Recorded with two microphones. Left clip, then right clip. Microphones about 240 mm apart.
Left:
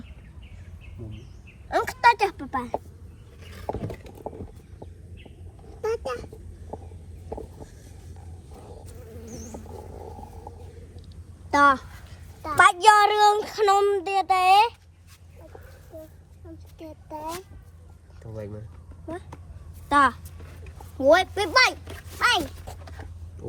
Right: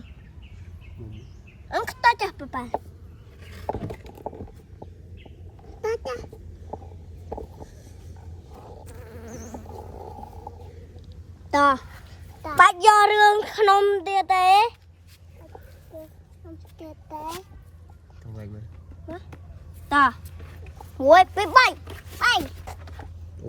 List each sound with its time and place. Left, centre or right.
1.7 s a woman's voice: centre
3.7 s vehicle: left
7.3 s vehicle: left
11.5 s a woman's voice: right
19.9 s a woman's voice: right
22.2 s dog: right